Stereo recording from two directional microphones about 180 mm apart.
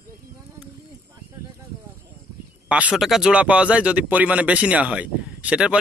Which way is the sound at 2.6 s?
5° right (ahead or behind).